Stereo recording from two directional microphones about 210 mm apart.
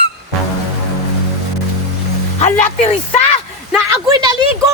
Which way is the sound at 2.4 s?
35° left (ahead or behind).